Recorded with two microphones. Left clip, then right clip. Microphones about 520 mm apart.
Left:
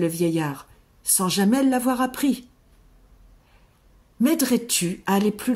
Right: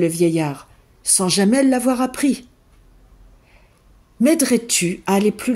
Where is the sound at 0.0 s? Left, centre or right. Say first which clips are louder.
Right 5 dB; left.